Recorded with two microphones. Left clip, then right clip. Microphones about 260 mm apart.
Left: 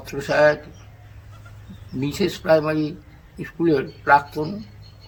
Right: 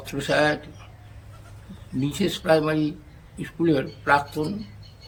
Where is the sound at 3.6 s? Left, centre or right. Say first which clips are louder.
Left 2 dB; centre.